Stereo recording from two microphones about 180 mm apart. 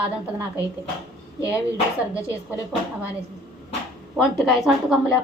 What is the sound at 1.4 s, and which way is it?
A woman's voice, 15° left (ahead or behind).